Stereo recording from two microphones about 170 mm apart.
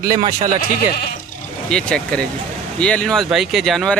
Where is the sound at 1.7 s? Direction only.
5° left (ahead or behind).